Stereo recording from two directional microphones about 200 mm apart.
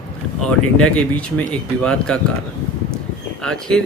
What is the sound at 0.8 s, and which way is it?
Speech, 5° left (ahead or behind).